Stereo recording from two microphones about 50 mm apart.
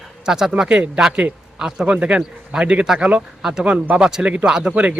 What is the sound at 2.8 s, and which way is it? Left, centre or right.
A man's voice, centre.